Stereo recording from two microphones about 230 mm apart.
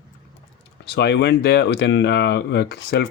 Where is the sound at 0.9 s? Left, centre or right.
Left.